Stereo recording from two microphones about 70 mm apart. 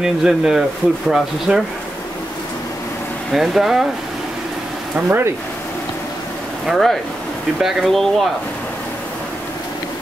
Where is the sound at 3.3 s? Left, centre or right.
Centre.